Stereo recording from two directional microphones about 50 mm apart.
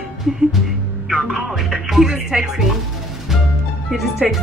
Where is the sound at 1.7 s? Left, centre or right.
Centre.